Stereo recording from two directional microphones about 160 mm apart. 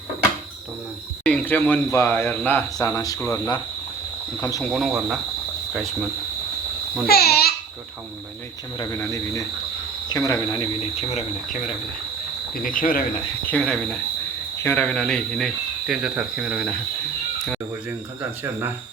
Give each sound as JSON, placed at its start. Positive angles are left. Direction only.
{"t": 1.2, "sound": "speech", "side_deg": 5}
{"t": 4.6, "sound": "speech", "side_deg": 0}
{"t": 7.1, "sound": "a child's voice", "side_deg": 75}
{"t": 8.8, "sound": "speech", "side_deg": 20}
{"t": 11.4, "sound": "cricket", "side_deg": 50}
{"t": 13.4, "sound": "speech", "side_deg": 5}
{"t": 18.2, "sound": "speech", "side_deg": -15}